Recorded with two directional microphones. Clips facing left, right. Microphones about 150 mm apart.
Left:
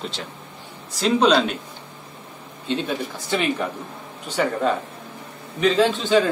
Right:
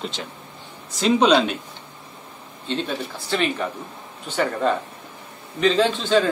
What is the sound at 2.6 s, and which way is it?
Speech, 10° left (ahead or behind).